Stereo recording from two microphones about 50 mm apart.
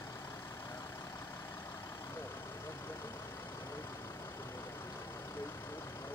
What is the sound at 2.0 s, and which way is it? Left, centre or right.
Vehicle, left.